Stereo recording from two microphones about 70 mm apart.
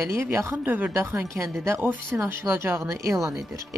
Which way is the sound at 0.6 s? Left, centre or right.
Right.